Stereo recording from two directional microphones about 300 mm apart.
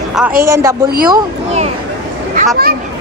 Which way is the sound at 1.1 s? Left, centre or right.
Right.